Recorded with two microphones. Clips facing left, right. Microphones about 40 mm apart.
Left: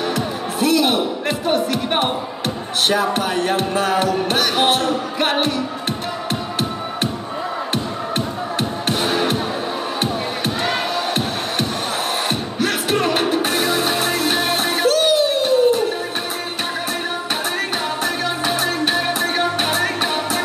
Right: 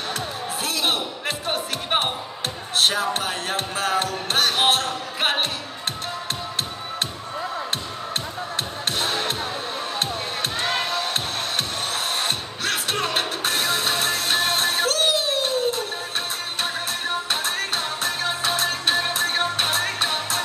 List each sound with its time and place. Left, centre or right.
0.1 s music: centre
8.5 s music: centre
10.4 s music: centre
17.6 s music: centre